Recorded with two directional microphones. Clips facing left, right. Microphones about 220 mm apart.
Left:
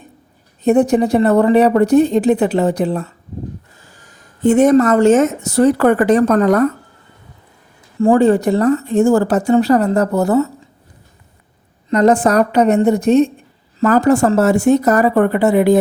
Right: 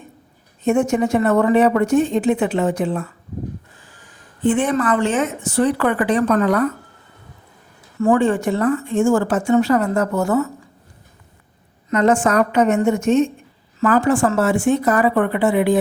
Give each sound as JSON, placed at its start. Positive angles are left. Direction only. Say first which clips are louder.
{"t": 0.6, "sound": "speech", "louder": "left 5 dB", "side_deg": 35}
{"t": 7.9, "sound": "speech", "louder": "left 5 dB", "side_deg": 30}
{"t": 11.9, "sound": "speech", "louder": "left 4 dB", "side_deg": 35}